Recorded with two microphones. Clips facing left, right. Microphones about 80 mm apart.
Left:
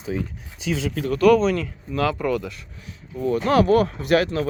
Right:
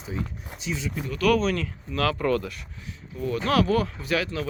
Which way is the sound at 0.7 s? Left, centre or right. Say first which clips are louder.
Left 6 dB; left.